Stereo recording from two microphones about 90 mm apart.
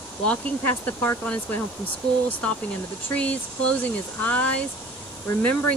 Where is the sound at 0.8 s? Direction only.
15° left (ahead or behind).